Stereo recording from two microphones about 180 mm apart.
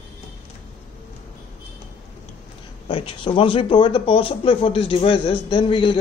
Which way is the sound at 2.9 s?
30° left (ahead or behind).